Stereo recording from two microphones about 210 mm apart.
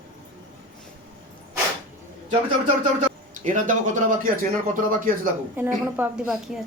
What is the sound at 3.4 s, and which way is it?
Speech, 35° right (ahead or behind).